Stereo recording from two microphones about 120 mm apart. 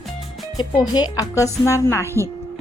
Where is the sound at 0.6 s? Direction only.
35° left (ahead or behind).